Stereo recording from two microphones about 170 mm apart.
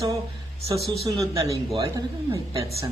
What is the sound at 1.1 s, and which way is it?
Speech, 20° right (ahead or behind).